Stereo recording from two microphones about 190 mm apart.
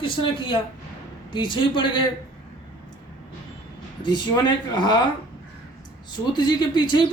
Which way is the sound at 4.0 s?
25° left (ahead or behind).